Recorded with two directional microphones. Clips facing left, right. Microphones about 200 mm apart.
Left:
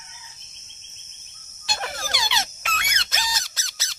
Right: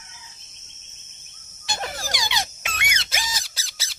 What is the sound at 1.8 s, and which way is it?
Squeak, 15° right (ahead or behind).